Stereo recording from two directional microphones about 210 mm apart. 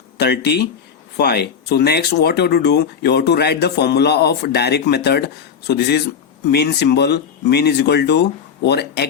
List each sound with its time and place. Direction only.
0.2 s speech: 50° left (ahead or behind)